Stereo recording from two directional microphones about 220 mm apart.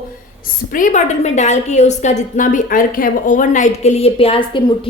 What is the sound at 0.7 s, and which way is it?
A woman's voice, 35° left (ahead or behind).